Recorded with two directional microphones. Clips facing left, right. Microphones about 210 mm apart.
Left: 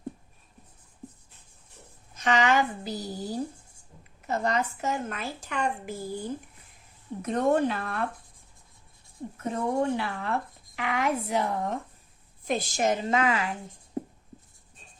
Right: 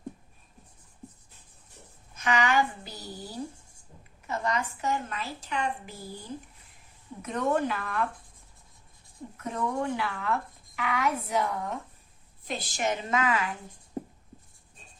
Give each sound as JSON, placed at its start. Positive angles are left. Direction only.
{"t": 2.2, "sound": "a woman's voice", "side_deg": 40}
{"t": 7.2, "sound": "speech", "side_deg": 35}
{"t": 9.4, "sound": "speech", "side_deg": 30}
{"t": 12.5, "sound": "speech", "side_deg": 45}